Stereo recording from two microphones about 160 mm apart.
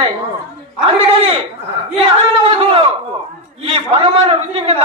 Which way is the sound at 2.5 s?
40° right (ahead or behind).